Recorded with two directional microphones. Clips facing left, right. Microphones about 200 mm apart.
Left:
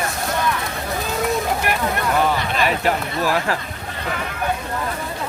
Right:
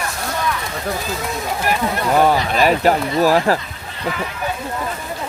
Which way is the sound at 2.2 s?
40° right (ahead or behind).